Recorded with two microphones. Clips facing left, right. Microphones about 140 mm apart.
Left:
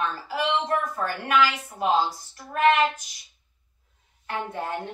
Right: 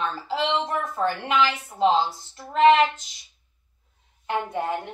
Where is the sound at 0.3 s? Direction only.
25° right (ahead or behind).